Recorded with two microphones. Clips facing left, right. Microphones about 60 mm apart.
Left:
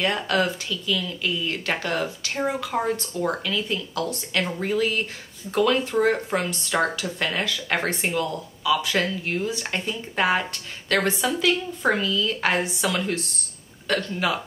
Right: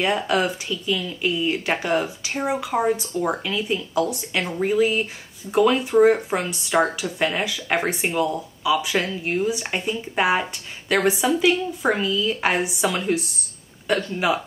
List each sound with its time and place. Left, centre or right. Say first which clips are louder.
0.0 s speech: right 2 dB; centre